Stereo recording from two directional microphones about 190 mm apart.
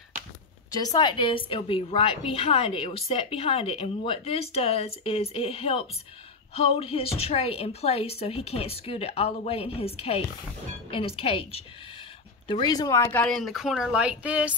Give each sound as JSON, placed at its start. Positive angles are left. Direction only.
{"t": 0.7, "sound": "a woman's voice", "side_deg": 20}